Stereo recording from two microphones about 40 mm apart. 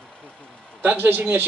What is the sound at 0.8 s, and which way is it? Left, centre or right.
Speech, right.